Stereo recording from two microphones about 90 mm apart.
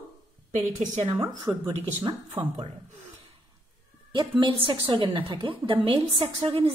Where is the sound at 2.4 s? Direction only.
55° right (ahead or behind).